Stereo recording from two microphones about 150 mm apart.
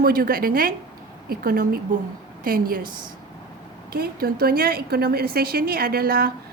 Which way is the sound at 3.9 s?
90° right.